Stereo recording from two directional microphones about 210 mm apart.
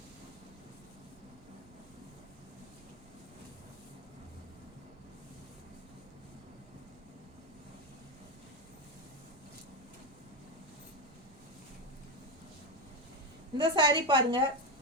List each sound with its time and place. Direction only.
13.6 s a woman's voice: 20° right (ahead or behind)